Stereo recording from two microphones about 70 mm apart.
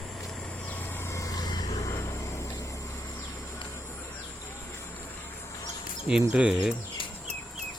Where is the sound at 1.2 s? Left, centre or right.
Left.